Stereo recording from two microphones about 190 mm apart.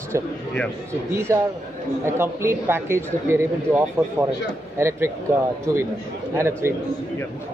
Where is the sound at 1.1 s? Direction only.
15° right (ahead or behind).